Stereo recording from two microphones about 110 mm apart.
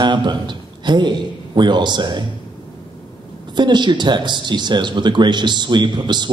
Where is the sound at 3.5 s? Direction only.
45° right (ahead or behind).